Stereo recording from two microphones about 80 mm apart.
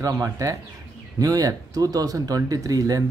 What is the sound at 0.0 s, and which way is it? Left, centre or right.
Speech, right.